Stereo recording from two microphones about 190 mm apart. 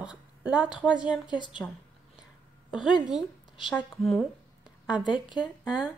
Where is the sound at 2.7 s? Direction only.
5° right (ahead or behind).